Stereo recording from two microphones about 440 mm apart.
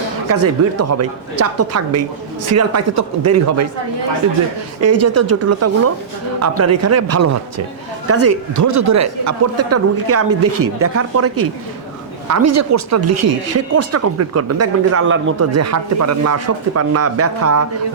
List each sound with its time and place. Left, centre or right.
0.3 s speech: right
4.8 s speech: right